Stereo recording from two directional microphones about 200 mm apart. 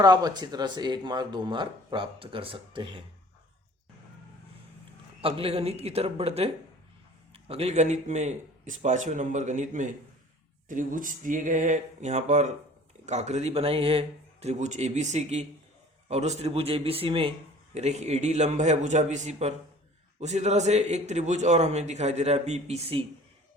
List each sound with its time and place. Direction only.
0.0 s speech: 20° right (ahead or behind)
5.2 s a man's voice: 30° right (ahead or behind)